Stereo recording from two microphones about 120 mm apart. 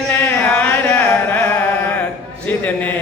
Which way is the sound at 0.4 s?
10° left (ahead or behind).